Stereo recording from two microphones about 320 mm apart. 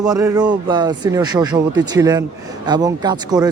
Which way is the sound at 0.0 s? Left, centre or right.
Centre.